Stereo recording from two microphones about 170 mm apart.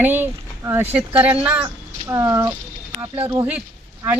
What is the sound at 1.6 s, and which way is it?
Speech, 20° right (ahead or behind).